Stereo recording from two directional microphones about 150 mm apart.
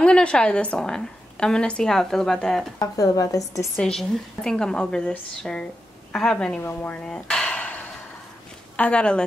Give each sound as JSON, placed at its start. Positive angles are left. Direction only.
{"t": 0.0, "sound": "a woman's voice", "side_deg": 5}
{"t": 2.8, "sound": "a woman's voice", "side_deg": 25}
{"t": 3.7, "sound": "a woman's voice", "side_deg": 5}
{"t": 6.6, "sound": "dishes", "side_deg": 15}
{"t": 8.7, "sound": "a woman's voice", "side_deg": 10}